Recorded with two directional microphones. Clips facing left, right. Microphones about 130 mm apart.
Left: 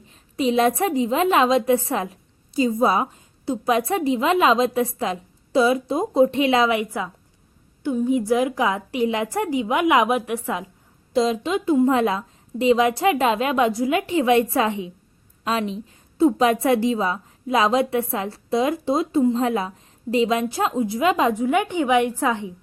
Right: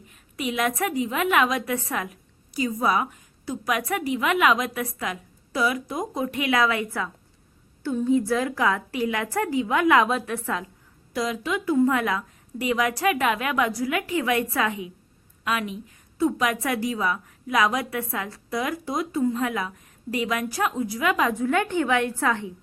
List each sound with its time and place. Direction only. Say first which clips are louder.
0.1 s a woman's voice: left 9 dB; 30° left (ahead or behind)